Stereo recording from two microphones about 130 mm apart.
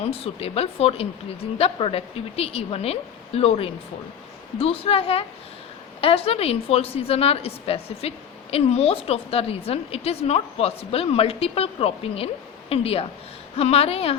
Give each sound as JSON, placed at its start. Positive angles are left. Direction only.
{"t": 0.0, "sound": "a woman's voice", "side_deg": 50}